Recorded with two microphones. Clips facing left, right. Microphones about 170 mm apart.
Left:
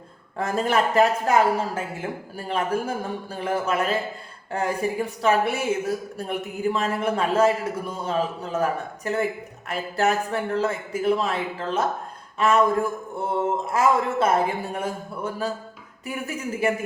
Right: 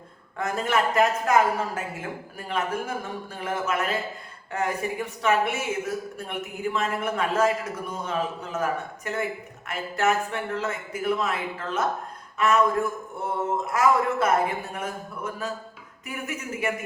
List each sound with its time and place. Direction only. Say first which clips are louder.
0.3 s a man's voice: left 3 dB; 35° left (ahead or behind)
6.7 s a man's voice: even; 35° left (ahead or behind)